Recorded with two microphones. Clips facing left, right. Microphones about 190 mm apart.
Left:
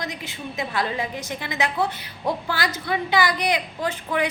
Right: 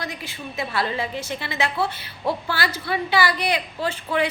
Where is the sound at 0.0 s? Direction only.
20° left (ahead or behind).